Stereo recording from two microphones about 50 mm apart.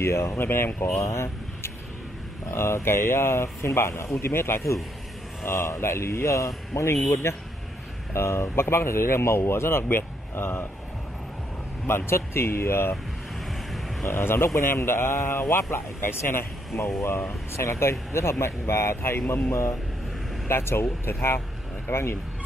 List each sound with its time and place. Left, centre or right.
0.0 s speech: left
0.4 s speech: left
0.9 s speech: left
7.3 s speech: left
12.1 s speech: left
13.5 s vehicle: centre
14.0 s speech: left
20.4 s speech: left